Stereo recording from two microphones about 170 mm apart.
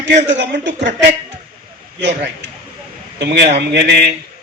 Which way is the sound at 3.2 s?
90° right.